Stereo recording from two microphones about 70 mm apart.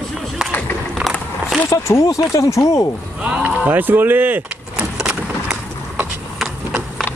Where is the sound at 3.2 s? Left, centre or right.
Centre.